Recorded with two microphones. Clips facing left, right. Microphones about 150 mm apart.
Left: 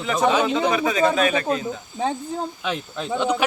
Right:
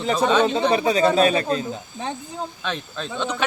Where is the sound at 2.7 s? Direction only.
10° left (ahead or behind).